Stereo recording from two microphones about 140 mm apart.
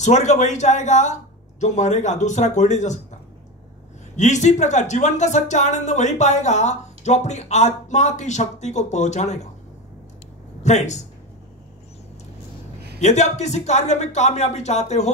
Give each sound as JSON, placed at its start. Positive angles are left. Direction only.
{"t": 0.0, "sound": "speech", "side_deg": 55}
{"t": 4.2, "sound": "speech", "side_deg": 60}
{"t": 10.6, "sound": "speech", "side_deg": 55}
{"t": 13.0, "sound": "speech", "side_deg": 55}